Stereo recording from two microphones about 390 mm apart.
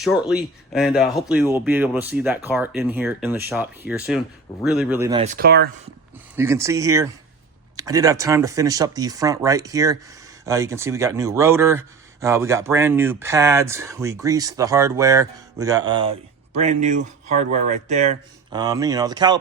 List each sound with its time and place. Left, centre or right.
0.0 s speech: centre; by 5.6 s right
6.3 s speech: centre